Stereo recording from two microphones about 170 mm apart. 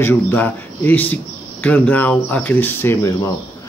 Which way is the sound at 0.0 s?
10° left (ahead or behind).